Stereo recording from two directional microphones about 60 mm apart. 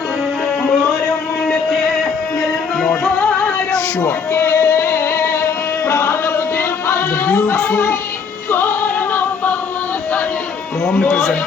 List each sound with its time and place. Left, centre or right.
0.6 s music: centre
3.2 s music: centre
4.0 s music: left